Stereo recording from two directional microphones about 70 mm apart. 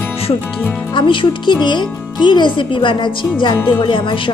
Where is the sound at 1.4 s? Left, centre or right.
Left.